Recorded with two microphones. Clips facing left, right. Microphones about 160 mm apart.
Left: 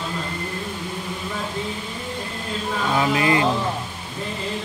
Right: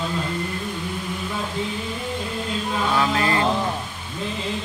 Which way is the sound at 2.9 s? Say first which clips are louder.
Left 3 dB; 15° left (ahead or behind).